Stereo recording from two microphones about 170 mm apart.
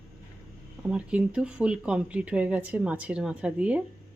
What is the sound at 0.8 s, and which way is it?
Speech, 5° right (ahead or behind).